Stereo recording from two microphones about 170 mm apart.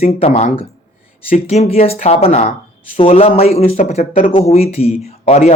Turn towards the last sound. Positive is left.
turn(degrees=40)  # may be behind; listen again after turning